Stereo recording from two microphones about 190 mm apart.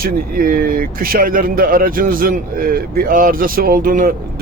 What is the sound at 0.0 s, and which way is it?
Speech, 50° right (ahead or behind).